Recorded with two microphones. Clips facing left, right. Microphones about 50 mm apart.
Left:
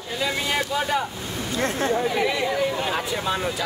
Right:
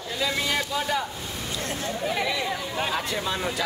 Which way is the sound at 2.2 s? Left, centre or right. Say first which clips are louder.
Left 5 dB; centre.